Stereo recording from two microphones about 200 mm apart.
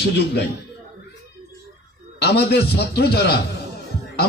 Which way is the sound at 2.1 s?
55° left (ahead or behind).